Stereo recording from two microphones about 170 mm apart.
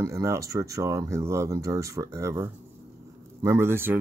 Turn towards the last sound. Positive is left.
turn(degrees=-15)  # may be behind; listen again after turning